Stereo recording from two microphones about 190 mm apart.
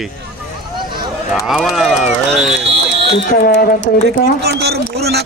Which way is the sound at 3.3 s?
55° left (ahead or behind).